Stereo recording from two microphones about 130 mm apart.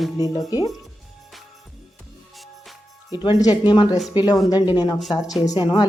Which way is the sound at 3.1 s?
30° left (ahead or behind).